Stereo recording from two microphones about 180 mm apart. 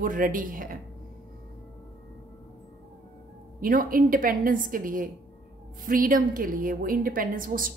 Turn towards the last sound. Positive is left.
turn(degrees=-50)  # may be behind; listen again after turning